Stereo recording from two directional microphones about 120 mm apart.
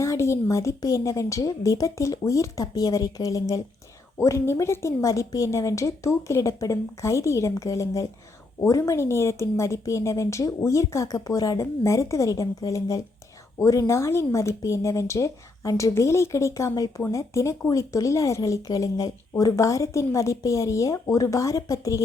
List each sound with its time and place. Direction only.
0.0 s speech: 25° left (ahead or behind)